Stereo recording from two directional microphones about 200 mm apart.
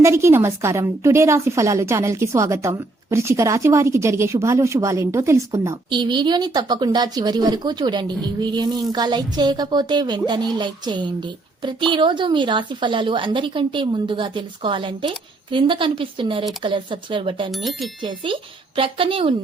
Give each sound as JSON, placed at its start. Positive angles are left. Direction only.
{"t": 0.0, "sound": "a woman's voice", "side_deg": -15}
{"t": 17.5, "sound": "speech", "side_deg": 0}
{"t": 18.8, "sound": "a woman's voice", "side_deg": -25}